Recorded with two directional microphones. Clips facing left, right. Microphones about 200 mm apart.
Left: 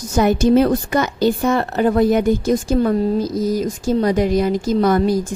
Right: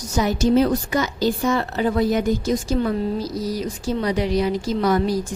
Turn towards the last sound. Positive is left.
turn(degrees=50)  # may be behind; listen again after turning